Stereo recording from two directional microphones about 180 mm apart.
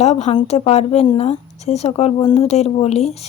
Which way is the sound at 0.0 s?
35° left (ahead or behind).